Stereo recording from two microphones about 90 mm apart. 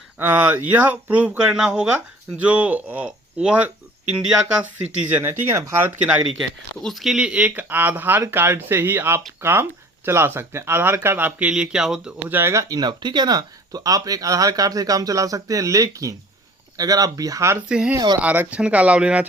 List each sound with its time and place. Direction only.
0.2 s speech: 20° right (ahead or behind)
5.0 s speech: 20° right (ahead or behind)
5.8 s speech: 15° right (ahead or behind)
6.8 s speech: centre (ahead or behind)
12.3 s speech: 25° right (ahead or behind)
12.6 s speech: 50° right (ahead or behind)
17.7 s speech: 10° right (ahead or behind)